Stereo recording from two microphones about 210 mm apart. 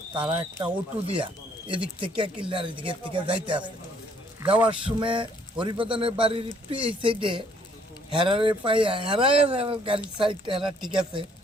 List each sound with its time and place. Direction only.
0.3 s speech: 25° right (ahead or behind)
4.6 s speech: 25° right (ahead or behind)